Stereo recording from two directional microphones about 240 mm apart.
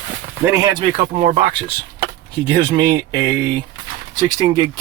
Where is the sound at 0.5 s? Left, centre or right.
Centre.